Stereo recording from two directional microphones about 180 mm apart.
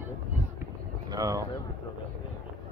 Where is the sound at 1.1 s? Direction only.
20° right (ahead or behind).